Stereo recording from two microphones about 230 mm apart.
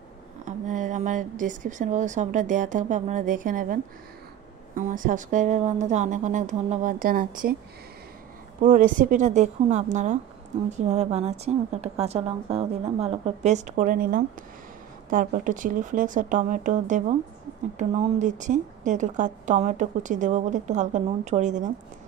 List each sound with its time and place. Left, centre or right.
0.5 s speech: right
8.5 s a woman's voice: right